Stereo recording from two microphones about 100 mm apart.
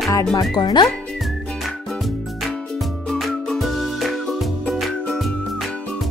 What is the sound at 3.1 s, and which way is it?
Music, centre (ahead or behind).